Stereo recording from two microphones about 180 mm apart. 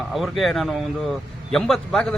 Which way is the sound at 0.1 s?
Centre (ahead or behind).